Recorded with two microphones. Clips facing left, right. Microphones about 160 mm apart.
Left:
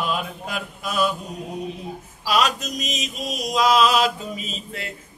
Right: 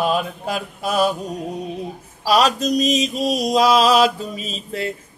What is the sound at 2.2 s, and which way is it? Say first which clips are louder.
Mantra: right 5 dB; 35° right (ahead or behind).